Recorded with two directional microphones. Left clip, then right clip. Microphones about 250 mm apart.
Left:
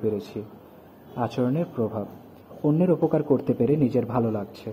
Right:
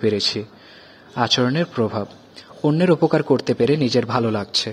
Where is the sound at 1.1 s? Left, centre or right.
Right.